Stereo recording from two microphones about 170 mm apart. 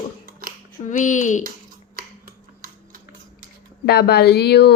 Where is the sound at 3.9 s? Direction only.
70° left (ahead or behind).